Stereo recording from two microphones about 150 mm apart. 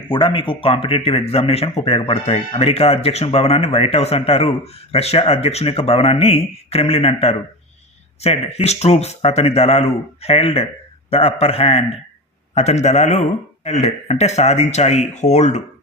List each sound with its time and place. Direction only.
0.1 s speech: 35° left (ahead or behind); by 15.6 s 50° left (ahead or behind)